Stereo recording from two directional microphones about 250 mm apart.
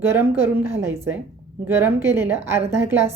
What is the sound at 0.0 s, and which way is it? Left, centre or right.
Speech, centre.